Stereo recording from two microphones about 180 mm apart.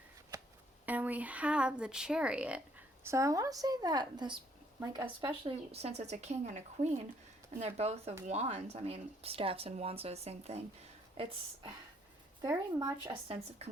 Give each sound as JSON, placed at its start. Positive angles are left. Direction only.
{"t": 0.3, "sound": "shuffling cards", "side_deg": -20}
{"t": 0.9, "sound": "a woman's voice", "side_deg": -10}
{"t": 5.7, "sound": "speech", "side_deg": -35}
{"t": 12.4, "sound": "a woman's voice", "side_deg": -20}
{"t": 13.2, "sound": "speech", "side_deg": -35}